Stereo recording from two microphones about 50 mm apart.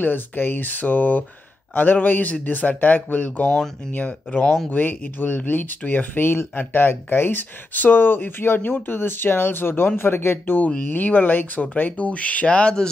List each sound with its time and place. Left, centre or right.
0.0 s speech: left; by 12.8 s centre